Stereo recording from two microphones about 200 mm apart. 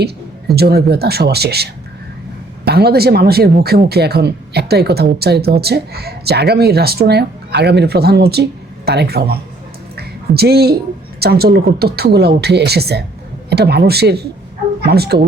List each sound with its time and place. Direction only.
0.0 s speech: 50° right (ahead or behind)
10.0 s a sound: 50° right (ahead or behind)
11.2 s speech: 50° right (ahead or behind)